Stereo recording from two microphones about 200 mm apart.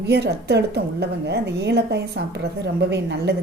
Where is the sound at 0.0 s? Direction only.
55° right (ahead or behind).